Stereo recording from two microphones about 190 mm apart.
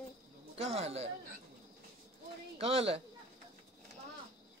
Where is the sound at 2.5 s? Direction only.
30° right (ahead or behind).